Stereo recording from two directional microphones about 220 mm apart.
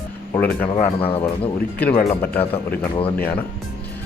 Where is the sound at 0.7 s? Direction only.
25° left (ahead or behind).